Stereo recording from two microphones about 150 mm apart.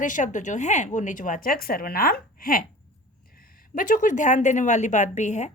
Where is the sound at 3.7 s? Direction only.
65° left (ahead or behind).